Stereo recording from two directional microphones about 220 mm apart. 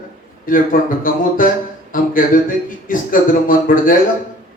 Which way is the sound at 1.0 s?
40° left (ahead or behind).